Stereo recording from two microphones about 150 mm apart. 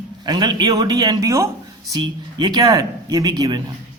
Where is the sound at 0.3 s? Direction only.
30° right (ahead or behind).